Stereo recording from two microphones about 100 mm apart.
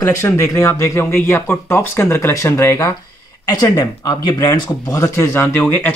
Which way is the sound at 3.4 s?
40° left (ahead or behind).